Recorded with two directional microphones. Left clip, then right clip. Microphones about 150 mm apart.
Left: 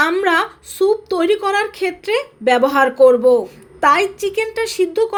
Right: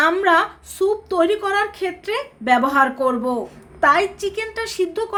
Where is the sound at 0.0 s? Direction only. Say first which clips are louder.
Left 1 dB; 15° left (ahead or behind).